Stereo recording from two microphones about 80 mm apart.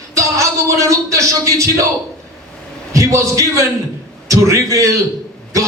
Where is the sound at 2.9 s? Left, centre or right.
Right.